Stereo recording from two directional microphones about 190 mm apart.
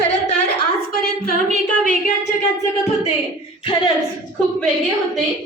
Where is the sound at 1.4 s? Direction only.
40° right (ahead or behind).